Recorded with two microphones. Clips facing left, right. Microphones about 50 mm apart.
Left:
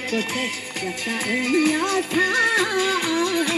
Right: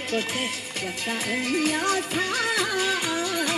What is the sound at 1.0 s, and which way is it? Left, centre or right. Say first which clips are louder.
Music: left 3 dB; left.